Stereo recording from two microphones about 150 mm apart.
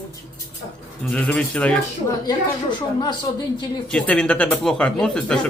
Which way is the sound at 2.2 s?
30° left (ahead or behind).